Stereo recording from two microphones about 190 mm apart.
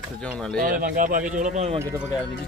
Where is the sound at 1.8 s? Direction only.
5° right (ahead or behind).